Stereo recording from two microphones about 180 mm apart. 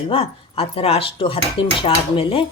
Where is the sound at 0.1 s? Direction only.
30° left (ahead or behind).